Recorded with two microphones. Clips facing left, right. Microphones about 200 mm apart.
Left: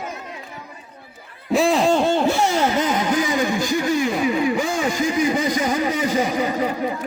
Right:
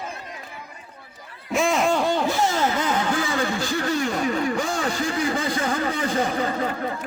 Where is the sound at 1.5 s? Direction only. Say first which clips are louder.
Left 4 dB; 35° left (ahead or behind).